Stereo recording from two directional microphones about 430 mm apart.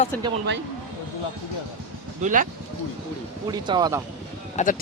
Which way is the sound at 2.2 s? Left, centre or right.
Centre.